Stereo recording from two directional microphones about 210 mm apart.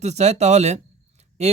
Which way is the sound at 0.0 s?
30° right (ahead or behind).